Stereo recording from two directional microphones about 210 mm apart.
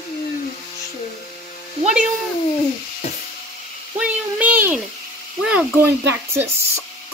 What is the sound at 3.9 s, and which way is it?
Speech, 5° right (ahead or behind).